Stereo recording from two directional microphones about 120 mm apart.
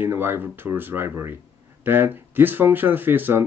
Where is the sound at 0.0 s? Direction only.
20° right (ahead or behind).